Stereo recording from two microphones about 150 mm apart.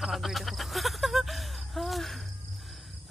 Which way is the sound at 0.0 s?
Centre (ahead or behind).